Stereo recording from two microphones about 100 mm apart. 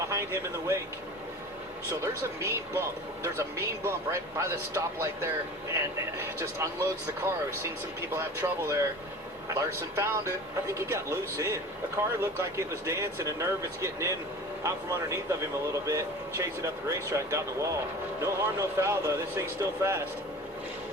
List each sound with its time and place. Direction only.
0.1 s speech: 25° right (ahead or behind)
1.9 s speech: 25° right (ahead or behind)
3.8 s speech: 30° right (ahead or behind)
6.6 s speech: 30° right (ahead or behind)